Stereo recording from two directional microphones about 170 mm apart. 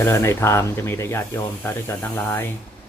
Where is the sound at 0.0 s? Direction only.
15° left (ahead or behind).